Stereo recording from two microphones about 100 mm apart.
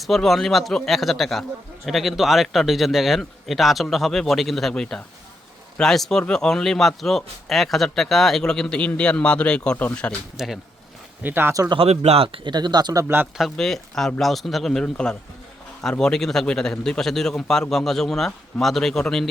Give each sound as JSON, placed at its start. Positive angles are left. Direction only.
{"t": 0.0, "sound": "speech", "side_deg": 0}
{"t": 10.3, "sound": "speech", "side_deg": -5}
{"t": 11.2, "sound": "speech", "side_deg": -20}
{"t": 11.7, "sound": "speech", "side_deg": -80}
{"t": 12.5, "sound": "speech", "side_deg": -45}
{"t": 13.3, "sound": "speech", "side_deg": 0}